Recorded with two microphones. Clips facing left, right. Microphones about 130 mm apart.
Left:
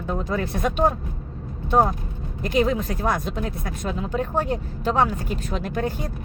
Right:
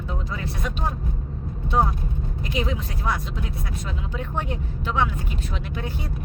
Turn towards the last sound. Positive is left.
turn(degrees=45)  # may be behind; listen again after turning